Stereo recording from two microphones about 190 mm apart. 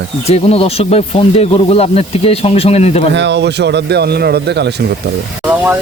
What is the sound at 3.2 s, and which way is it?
A man's voice, 65° right (ahead or behind).